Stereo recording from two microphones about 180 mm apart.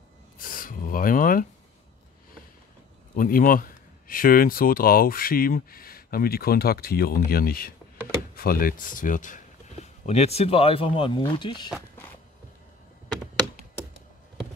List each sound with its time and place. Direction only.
0.4 s a sound: 50° left (ahead or behind)
3.2 s speech: 50° left (ahead or behind)
10.0 s speech: 35° left (ahead or behind)